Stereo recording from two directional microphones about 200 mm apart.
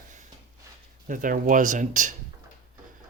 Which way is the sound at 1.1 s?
40° right (ahead or behind).